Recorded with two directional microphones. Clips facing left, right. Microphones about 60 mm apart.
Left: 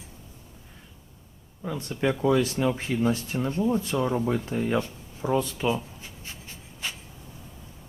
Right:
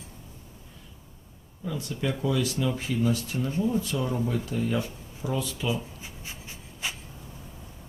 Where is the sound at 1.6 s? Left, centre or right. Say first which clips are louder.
Left 3 dB; left.